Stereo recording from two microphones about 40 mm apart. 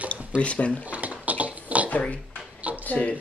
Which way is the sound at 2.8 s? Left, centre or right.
Left.